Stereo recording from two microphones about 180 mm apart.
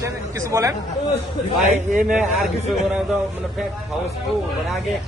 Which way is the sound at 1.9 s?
5° right (ahead or behind).